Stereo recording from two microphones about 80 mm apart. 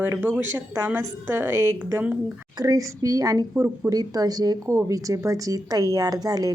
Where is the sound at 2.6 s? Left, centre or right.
Right.